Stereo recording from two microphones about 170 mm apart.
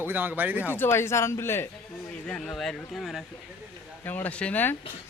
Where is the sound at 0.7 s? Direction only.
15° left (ahead or behind).